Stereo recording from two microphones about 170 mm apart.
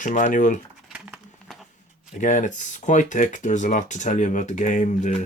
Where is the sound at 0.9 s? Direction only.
5° right (ahead or behind).